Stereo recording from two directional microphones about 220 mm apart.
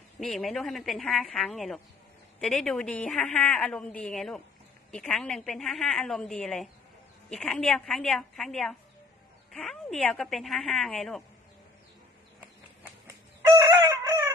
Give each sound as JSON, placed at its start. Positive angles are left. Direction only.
{"t": 0.2, "sound": "a woman's voice", "side_deg": 0}
{"t": 13.6, "sound": "fowl", "side_deg": -20}